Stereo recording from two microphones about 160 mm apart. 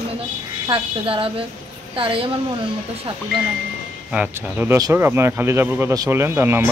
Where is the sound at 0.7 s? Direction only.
35° right (ahead or behind).